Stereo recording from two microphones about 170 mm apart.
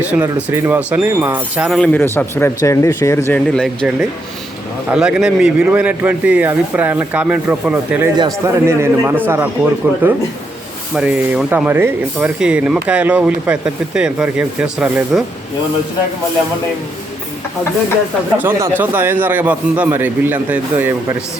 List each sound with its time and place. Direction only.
0.0 s speech: 10° right (ahead or behind)
1.9 s speech: 15° left (ahead or behind)
3.5 s speech: 5° left (ahead or behind)
18.3 s speech: 10° right (ahead or behind)